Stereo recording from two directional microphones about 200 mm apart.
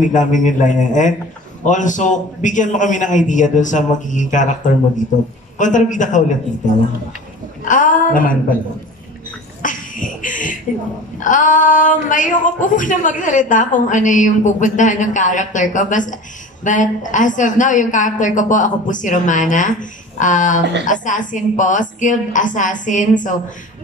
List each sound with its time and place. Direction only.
0.0 s speech: 40° left (ahead or behind)
7.6 s a sound: 40° left (ahead or behind)
9.6 s cough: 40° left (ahead or behind)
11.1 s speech: 40° left (ahead or behind)